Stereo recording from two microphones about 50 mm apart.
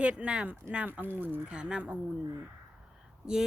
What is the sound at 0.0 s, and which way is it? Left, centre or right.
Speech, right.